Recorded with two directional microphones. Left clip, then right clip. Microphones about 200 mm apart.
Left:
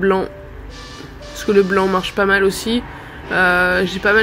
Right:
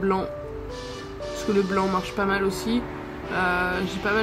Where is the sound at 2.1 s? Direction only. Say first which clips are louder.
Left 9 dB; 10° left (ahead or behind).